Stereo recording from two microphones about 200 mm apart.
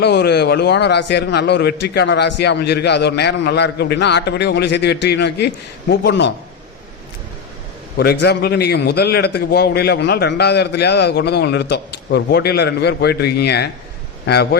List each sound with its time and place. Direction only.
0.0 s a man's voice: 55° left (ahead or behind)
7.9 s a man's voice: 55° left (ahead or behind)